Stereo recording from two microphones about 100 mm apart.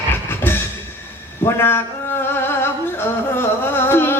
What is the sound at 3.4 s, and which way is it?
Music, 25° left (ahead or behind).